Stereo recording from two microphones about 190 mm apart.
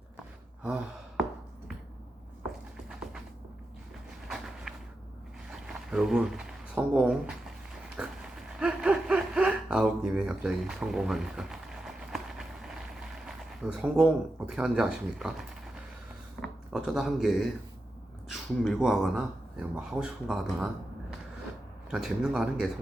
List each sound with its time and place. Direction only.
0.6 s gasp: 5° right (ahead or behind)
4.3 s a sound: centre (ahead or behind)
5.5 s speech: 5° right (ahead or behind)
7.9 s a sound: 5° right (ahead or behind)
13.1 s speech: centre (ahead or behind)
21.8 s speech: centre (ahead or behind)